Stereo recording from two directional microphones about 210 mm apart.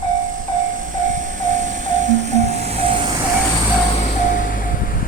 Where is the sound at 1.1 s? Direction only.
35° right (ahead or behind).